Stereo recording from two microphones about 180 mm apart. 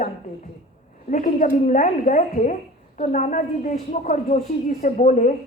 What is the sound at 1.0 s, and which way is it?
A woman's voice, 45° left (ahead or behind).